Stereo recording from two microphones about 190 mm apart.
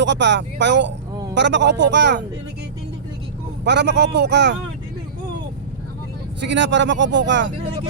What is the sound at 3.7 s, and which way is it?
Speech, 65° right (ahead or behind).